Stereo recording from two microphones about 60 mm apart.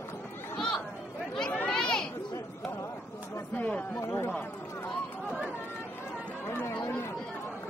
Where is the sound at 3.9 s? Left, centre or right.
Left.